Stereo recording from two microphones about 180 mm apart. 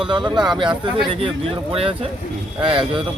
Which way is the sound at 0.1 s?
25° right (ahead or behind).